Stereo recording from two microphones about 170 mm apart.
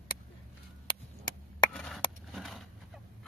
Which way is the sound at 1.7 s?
5° left (ahead or behind).